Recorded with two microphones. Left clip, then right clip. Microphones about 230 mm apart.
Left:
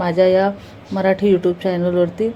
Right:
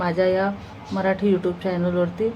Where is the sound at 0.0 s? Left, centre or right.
Centre.